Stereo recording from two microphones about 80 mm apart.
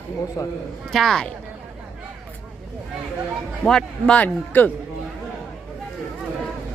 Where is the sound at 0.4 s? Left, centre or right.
Left.